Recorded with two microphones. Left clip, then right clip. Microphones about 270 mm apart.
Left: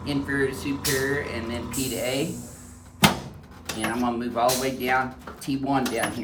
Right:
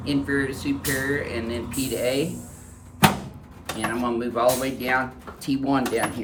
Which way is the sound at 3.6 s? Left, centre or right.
Centre.